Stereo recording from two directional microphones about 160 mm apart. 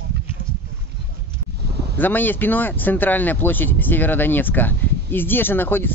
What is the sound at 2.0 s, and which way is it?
Speech, 10° left (ahead or behind).